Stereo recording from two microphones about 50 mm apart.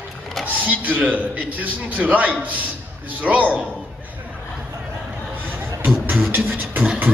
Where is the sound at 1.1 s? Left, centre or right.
Right.